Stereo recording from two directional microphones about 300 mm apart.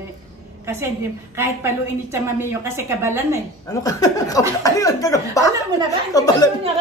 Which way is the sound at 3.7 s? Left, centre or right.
Centre.